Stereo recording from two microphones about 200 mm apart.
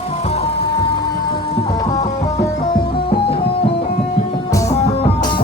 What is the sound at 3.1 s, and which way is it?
Music, 25° left (ahead or behind).